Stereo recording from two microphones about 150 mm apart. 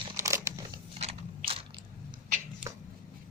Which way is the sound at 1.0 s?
40° right (ahead or behind).